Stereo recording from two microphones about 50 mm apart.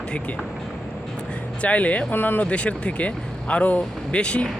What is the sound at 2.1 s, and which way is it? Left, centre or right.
Speech, left.